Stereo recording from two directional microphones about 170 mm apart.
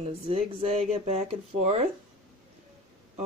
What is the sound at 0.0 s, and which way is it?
Speech, 35° right (ahead or behind).